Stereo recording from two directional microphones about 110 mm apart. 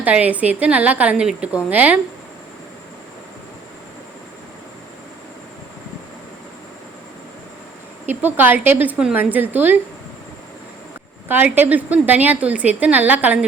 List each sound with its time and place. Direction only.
0.0 s a woman's voice: 15° right (ahead or behind)
8.0 s a woman's voice: 15° right (ahead or behind)
11.3 s a woman's voice: 15° right (ahead or behind)